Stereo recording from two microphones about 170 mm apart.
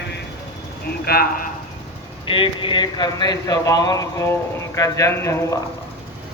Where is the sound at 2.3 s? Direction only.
30° left (ahead or behind); by 5.5 s 15° left (ahead or behind).